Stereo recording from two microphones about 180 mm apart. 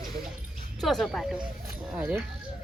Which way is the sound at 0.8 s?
Centre (ahead or behind).